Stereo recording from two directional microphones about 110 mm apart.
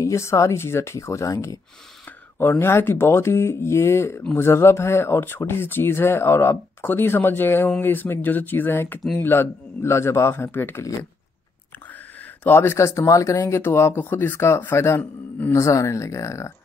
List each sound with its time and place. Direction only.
0.0 s speech: 25° left (ahead or behind)
2.3 s speech: 20° left (ahead or behind)
12.4 s speech: 20° left (ahead or behind)
15.6 s speech: 25° left (ahead or behind)